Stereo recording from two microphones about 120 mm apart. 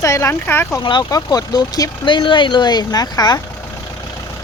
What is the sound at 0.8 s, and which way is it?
Speech, 35° left (ahead or behind).